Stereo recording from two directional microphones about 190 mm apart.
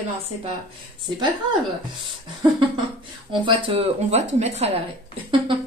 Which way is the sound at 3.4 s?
30° right (ahead or behind).